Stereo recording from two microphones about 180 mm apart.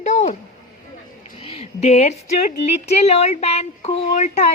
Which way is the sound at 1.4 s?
30° left (ahead or behind).